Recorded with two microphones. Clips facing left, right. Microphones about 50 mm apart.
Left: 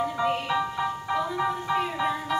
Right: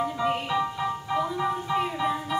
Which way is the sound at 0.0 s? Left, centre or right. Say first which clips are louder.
Even; centre.